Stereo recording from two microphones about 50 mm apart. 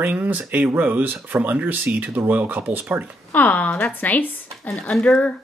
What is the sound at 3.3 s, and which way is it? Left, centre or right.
A woman's voice, left.